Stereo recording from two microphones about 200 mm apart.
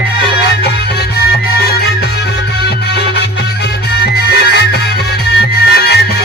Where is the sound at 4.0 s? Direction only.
55° left (ahead or behind).